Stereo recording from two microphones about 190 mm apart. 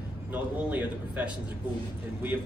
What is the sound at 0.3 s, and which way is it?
Speech, 10° right (ahead or behind).